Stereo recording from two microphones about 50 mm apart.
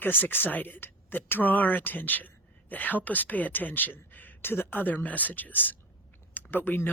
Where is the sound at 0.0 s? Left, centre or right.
Left.